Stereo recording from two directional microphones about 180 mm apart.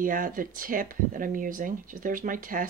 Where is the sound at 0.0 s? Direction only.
50° right (ahead or behind).